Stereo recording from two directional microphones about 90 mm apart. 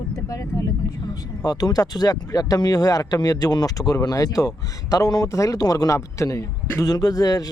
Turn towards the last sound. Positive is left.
turn(degrees=45)  # may be behind; listen again after turning